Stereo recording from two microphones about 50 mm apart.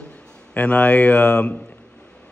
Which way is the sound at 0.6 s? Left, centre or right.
Left.